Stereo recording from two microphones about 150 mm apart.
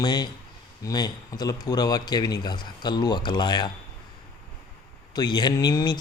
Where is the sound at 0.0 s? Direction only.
25° left (ahead or behind).